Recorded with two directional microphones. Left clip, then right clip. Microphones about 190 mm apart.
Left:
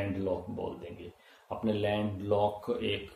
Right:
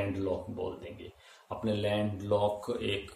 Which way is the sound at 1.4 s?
10° left (ahead or behind).